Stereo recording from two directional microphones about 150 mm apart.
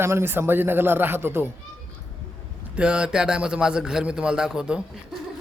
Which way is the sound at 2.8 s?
5° right (ahead or behind).